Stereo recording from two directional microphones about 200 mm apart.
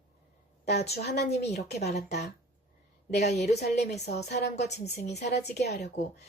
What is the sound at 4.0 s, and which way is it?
Speech, 55° left (ahead or behind).